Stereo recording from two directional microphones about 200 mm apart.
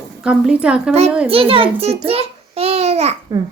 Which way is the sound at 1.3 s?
30° right (ahead or behind).